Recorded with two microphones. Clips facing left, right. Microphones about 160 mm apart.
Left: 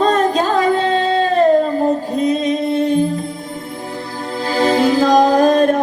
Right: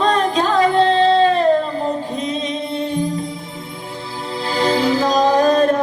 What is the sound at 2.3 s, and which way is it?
Music, 50° left (ahead or behind).